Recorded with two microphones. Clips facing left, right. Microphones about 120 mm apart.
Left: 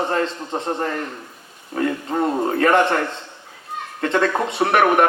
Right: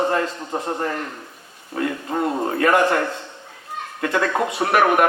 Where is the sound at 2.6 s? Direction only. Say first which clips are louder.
Left 1 dB; 30° left (ahead or behind).